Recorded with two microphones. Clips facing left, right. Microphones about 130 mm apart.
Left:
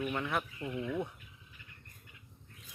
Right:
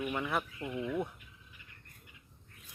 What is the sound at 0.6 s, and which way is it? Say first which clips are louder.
Speech: right 1 dB; 15° right (ahead or behind).